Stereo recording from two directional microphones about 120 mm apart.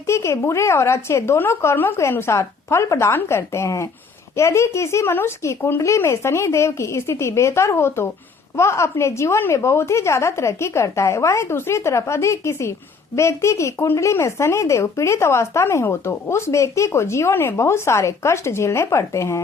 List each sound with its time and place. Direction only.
0.1 s speech: 25° left (ahead or behind)